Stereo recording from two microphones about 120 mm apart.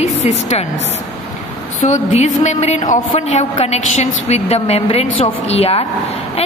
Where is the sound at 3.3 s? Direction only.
65° left (ahead or behind).